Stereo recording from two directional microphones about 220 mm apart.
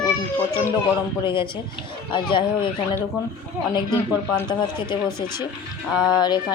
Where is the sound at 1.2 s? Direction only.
20° left (ahead or behind).